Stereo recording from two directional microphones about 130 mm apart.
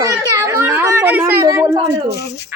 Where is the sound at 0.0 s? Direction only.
25° right (ahead or behind).